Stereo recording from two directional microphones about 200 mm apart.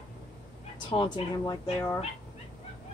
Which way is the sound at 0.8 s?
25° left (ahead or behind).